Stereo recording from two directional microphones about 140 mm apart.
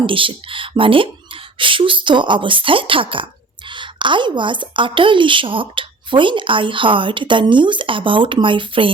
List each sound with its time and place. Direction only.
0.0 s a woman's voice: 40° right (ahead or behind)